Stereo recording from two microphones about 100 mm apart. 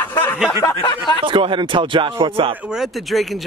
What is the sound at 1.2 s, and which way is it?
Speech, 60° right (ahead or behind).